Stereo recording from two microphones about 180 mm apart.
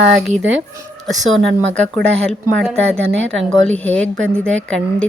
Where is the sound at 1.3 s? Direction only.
90° right.